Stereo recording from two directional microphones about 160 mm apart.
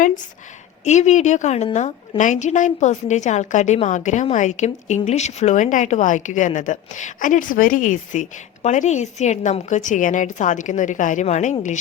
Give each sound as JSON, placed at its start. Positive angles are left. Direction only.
{"t": 0.9, "sound": "a woman's voice", "side_deg": 45}